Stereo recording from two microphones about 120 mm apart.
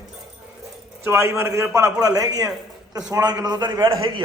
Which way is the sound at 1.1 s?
20° right (ahead or behind).